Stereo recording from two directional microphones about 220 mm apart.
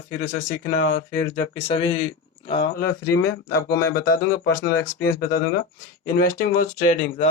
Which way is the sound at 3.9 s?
40° left (ahead or behind).